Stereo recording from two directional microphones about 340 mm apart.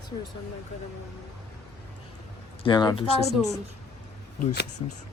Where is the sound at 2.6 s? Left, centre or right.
Centre.